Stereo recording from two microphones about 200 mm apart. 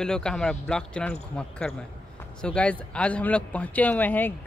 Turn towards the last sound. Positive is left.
turn(degrees=10)  # may be behind; listen again after turning